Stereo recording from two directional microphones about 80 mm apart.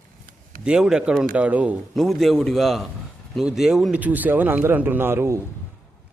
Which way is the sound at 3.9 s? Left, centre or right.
Right.